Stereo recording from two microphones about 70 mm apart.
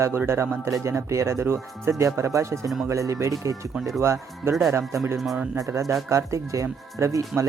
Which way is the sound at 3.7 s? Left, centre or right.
Centre.